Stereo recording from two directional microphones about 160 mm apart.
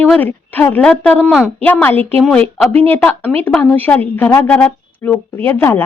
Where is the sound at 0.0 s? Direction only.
10° left (ahead or behind).